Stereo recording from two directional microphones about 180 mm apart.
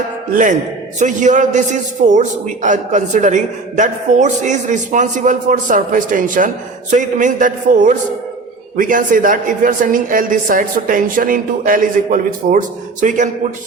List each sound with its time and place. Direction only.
0.3 s a man's voice: 45° right (ahead or behind)